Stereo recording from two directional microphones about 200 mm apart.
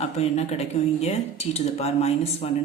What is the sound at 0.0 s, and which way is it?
Speech, 30° left (ahead or behind).